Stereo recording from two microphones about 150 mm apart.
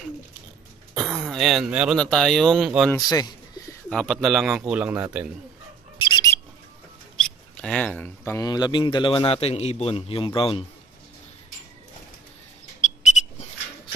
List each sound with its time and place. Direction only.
0.9 s throat clearing: centre (ahead or behind)
2.0 s a man's voice: 5° left (ahead or behind)
3.0 s a sound: 25° left (ahead or behind)
3.9 s a man's voice: 5° left (ahead or behind); by 5.1 s 15° right (ahead or behind)
5.9 s bird: 30° left (ahead or behind)
7.2 s speech: 5° left (ahead or behind)
8.5 s a man's voice: 25° left (ahead or behind)